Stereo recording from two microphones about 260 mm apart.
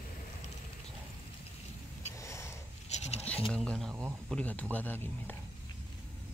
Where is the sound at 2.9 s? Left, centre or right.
Left.